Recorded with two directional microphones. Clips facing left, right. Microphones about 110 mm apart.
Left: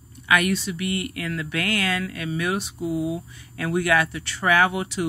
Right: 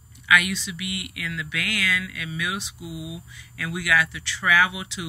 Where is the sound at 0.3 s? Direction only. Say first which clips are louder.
Left 1 dB; 40° left (ahead or behind).